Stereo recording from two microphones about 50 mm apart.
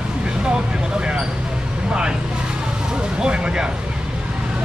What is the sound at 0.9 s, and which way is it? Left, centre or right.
Speech, centre.